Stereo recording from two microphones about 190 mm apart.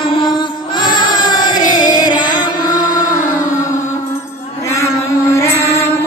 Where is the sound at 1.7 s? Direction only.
20° left (ahead or behind).